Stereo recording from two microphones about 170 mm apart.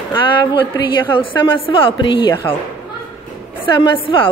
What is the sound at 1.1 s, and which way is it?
A woman's voice, 30° left (ahead or behind).